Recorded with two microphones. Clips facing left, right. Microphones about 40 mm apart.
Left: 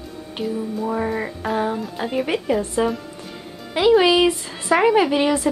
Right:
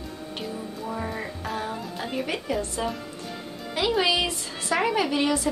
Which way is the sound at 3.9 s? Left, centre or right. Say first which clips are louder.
Left 10 dB; centre.